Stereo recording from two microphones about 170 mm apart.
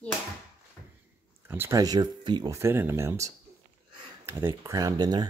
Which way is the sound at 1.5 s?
15° right (ahead or behind).